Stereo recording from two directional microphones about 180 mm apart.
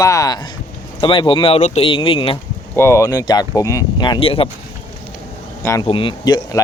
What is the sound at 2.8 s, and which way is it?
Speech, 15° left (ahead or behind).